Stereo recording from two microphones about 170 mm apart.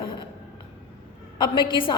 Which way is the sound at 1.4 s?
30° left (ahead or behind).